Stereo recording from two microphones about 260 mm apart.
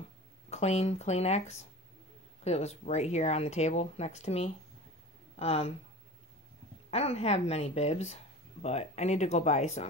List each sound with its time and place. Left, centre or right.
0.5 s speech: left
6.9 s speech: left